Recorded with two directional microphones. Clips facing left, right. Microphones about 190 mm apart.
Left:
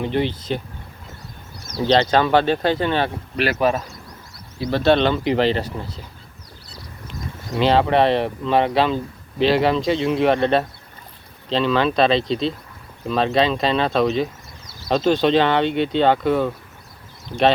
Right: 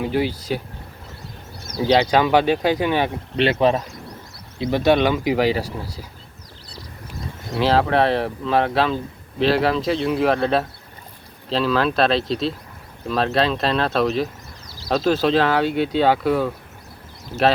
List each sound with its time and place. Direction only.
0.0 s speech: 5° right (ahead or behind)
1.8 s speech: 10° right (ahead or behind)
3.3 s speech: 25° right (ahead or behind)
4.6 s speech: 15° right (ahead or behind)
7.1 s speech: centre (ahead or behind)